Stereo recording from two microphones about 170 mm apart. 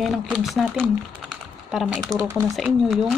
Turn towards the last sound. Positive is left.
turn(degrees=0)  # may be behind; listen again after turning